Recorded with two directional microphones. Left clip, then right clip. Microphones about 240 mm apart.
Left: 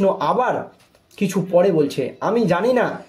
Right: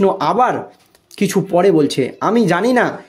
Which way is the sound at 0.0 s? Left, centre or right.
Right.